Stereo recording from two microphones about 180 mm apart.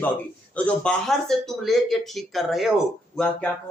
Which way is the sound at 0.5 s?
5° left (ahead or behind).